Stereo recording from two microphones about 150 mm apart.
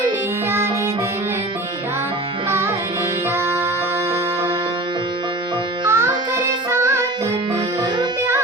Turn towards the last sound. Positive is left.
turn(degrees=-20)  # may be behind; listen again after turning